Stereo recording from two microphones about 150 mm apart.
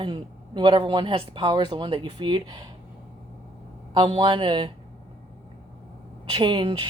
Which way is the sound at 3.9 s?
35° right (ahead or behind).